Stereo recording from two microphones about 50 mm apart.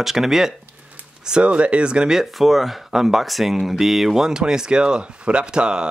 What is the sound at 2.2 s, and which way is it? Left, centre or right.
Speech, centre.